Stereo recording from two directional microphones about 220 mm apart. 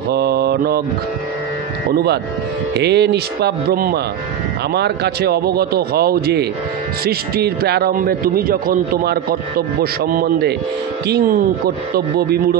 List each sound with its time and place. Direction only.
0.1 s mantra: 45° right (ahead or behind)
1.9 s a man's voice: 45° right (ahead or behind)